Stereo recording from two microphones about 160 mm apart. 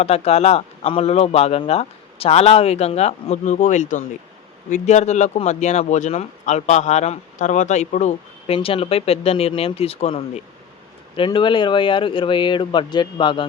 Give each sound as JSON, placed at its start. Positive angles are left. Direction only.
{"t": 0.0, "sound": "speech", "side_deg": 40}
{"t": 8.5, "sound": "speech", "side_deg": 35}